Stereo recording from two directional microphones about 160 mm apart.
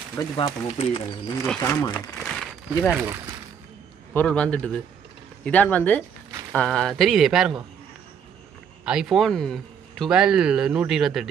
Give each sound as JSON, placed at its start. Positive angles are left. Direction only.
{"t": 0.2, "sound": "speech", "side_deg": 20}
{"t": 0.7, "sound": "speech", "side_deg": 35}
{"t": 1.6, "sound": "a man's voice", "side_deg": 15}
{"t": 2.1, "sound": "a sound", "side_deg": 0}
{"t": 2.9, "sound": "speech", "side_deg": -15}
{"t": 4.1, "sound": "a man's voice", "side_deg": 10}
{"t": 8.8, "sound": "speech", "side_deg": -5}